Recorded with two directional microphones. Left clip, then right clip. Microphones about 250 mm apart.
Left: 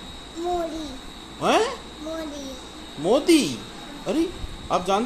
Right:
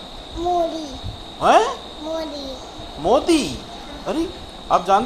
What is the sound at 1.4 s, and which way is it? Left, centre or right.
Speech, centre.